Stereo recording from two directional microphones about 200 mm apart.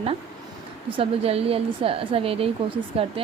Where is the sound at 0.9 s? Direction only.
25° right (ahead or behind).